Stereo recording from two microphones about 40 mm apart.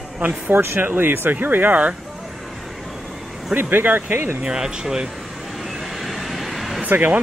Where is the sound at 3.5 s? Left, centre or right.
Right.